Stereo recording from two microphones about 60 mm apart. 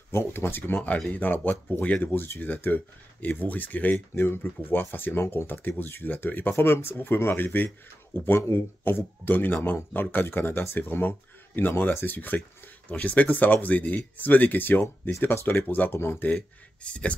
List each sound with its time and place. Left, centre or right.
0.1 s speech: left
5.2 s speech: left
5.5 s speech: left
6.5 s speech: left
15.6 s speech: left
16.8 s speech: centre